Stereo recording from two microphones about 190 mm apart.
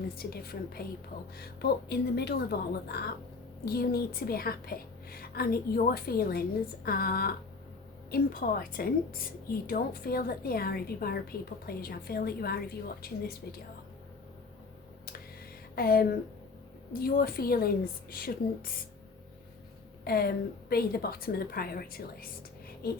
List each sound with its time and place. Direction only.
0.2 s a woman's voice: 55° left (ahead or behind)
15.7 s a woman's voice: 50° left (ahead or behind)
20.1 s a woman's voice: 55° left (ahead or behind)